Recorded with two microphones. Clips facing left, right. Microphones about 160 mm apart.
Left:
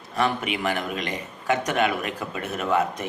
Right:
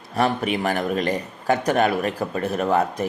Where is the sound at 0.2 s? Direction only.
40° right (ahead or behind).